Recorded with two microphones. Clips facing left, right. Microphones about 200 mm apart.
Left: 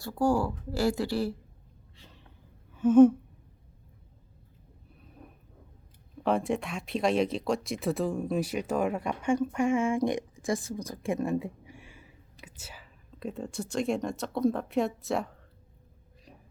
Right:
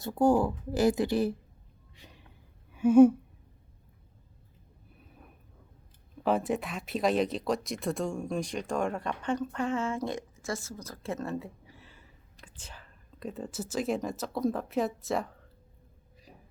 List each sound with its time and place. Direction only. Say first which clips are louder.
0.0 s a woman's voice: right 2 dB; 20° right (ahead or behind)
2.0 s a sound: right 1 dB; 15° right (ahead or behind)
6.2 s speech: left 1 dB; 5° right (ahead or behind)